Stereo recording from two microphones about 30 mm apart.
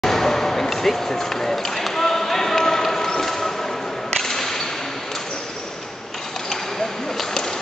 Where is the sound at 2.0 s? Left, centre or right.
Centre.